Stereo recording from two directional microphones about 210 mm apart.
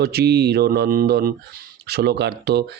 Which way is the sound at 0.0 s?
50° right (ahead or behind).